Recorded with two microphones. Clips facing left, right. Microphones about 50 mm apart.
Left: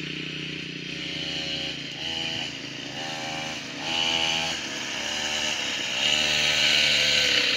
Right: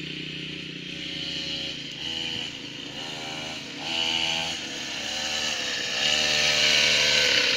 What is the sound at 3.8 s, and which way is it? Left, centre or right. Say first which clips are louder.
Vehicle: left 1 dB; left.